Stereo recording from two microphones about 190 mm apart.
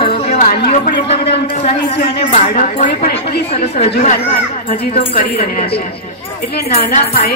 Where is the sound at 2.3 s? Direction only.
40° left (ahead or behind).